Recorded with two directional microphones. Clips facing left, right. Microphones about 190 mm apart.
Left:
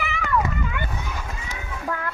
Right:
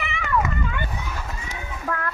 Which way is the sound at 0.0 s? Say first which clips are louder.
Left 2 dB; 5° left (ahead or behind).